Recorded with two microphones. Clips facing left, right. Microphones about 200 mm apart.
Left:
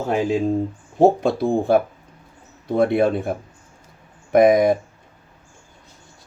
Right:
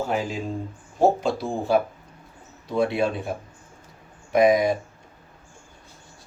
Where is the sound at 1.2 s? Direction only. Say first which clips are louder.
Left 6 dB; 55° left (ahead or behind).